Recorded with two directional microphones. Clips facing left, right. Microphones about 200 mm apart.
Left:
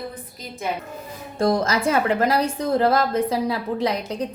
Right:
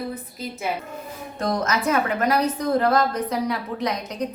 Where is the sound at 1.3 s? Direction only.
30° left (ahead or behind).